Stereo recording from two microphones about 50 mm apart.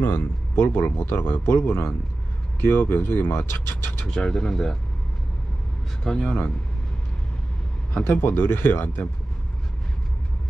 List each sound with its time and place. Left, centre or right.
0.0 s speech: left
4.1 s speech: centre
6.2 s speech: left
8.0 s speech: left